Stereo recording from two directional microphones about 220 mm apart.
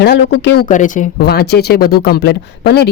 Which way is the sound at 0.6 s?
35° left (ahead or behind).